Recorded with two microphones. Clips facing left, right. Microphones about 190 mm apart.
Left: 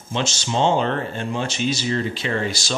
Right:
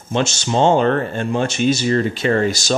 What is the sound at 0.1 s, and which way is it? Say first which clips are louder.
Speech: right 5 dB; 50° right (ahead or behind).